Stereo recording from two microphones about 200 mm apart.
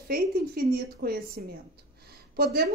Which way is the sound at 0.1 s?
50° right (ahead or behind).